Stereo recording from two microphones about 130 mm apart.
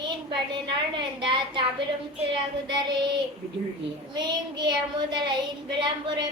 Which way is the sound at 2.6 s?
35° right (ahead or behind).